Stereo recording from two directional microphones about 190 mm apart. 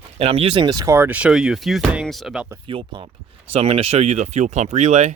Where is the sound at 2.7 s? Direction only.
25° right (ahead or behind).